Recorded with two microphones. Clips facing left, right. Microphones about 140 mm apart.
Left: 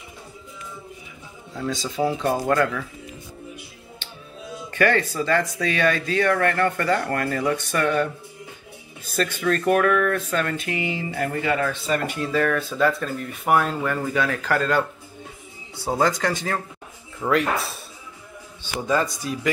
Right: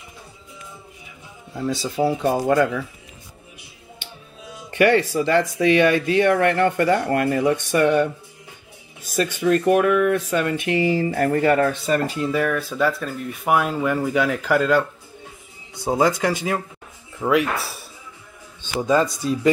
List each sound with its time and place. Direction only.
1.5 s speech: 5° right (ahead or behind)
4.6 s speech: 20° right (ahead or behind)
9.4 s speech: 15° right (ahead or behind)
10.7 s speech: 35° right (ahead or behind)
12.2 s speech: 10° right (ahead or behind)
15.7 s speech: 15° right (ahead or behind)
18.6 s speech: 20° right (ahead or behind)